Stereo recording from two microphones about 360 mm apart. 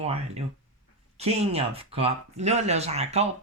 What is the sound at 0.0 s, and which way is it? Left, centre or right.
Speech, centre.